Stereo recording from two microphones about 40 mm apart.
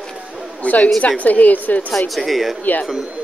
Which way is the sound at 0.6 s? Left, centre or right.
Left.